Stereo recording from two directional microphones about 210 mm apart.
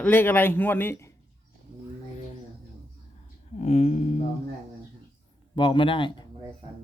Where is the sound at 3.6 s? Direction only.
30° left (ahead or behind).